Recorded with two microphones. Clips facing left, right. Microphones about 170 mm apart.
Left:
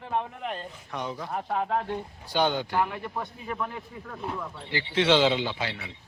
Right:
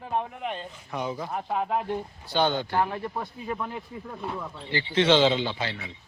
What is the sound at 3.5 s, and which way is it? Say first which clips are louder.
Speech: right 1 dB; 15° right (ahead or behind).